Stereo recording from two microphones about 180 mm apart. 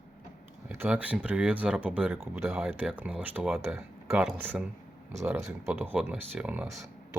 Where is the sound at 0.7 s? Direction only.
10° right (ahead or behind).